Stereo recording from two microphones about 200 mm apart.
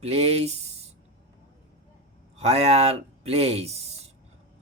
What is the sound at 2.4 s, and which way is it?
Speech, 30° right (ahead or behind).